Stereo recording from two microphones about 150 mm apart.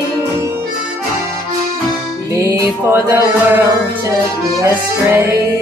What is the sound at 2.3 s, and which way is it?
Music, 20° right (ahead or behind).